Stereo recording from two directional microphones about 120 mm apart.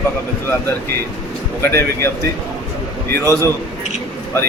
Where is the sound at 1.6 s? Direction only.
20° left (ahead or behind).